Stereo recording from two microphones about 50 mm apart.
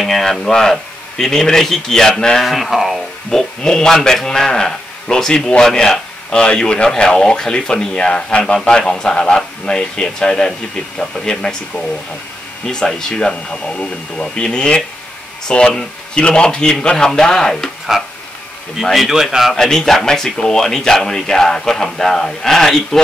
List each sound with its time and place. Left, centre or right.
0.0 s speech: centre
2.4 s speech: centre
3.3 s speech: centre
17.9 s a man's voice: centre
19.5 s speech: centre